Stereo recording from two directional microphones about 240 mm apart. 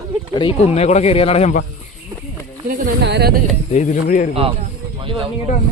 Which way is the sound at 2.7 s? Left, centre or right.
Right.